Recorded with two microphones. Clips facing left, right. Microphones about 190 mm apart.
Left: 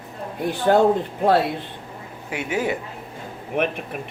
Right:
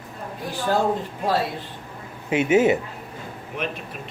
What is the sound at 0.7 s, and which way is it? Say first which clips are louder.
Speech: left 6 dB; 60° left (ahead or behind).